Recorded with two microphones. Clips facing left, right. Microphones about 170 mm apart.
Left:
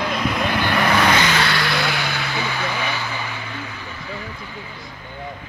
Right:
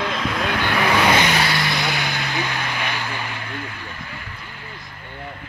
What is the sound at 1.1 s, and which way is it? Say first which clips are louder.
Vehicle: even; 20° right (ahead or behind).